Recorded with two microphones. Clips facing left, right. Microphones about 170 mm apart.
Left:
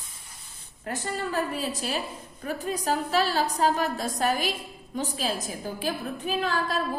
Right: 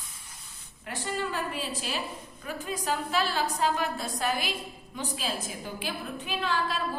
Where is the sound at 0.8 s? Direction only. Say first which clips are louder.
Left 2 dB; 40° left (ahead or behind).